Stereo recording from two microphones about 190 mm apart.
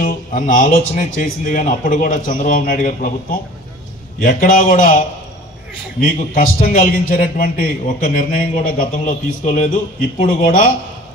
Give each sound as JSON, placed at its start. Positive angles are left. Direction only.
{"t": 0.0, "sound": "a man's voice", "side_deg": 45}
{"t": 6.3, "sound": "a man's voice", "side_deg": 50}